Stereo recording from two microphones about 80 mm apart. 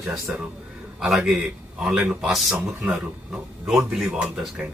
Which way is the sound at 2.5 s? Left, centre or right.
Centre.